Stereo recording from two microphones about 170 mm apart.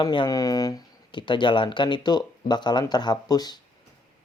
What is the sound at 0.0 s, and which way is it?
Speech, 25° left (ahead or behind).